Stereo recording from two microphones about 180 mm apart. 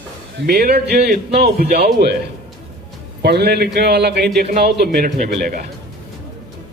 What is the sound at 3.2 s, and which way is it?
Speech, 65° right (ahead or behind).